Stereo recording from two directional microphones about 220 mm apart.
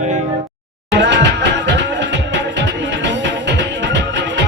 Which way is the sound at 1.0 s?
55° right (ahead or behind).